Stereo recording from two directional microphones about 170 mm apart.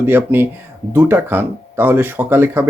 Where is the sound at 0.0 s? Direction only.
10° right (ahead or behind).